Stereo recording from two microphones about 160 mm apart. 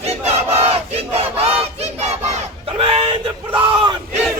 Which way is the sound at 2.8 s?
35° right (ahead or behind).